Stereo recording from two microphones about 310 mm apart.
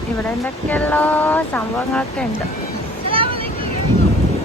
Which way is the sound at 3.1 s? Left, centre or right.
Centre.